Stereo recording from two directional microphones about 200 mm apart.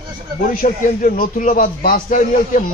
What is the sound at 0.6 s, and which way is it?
A man's voice, 40° left (ahead or behind).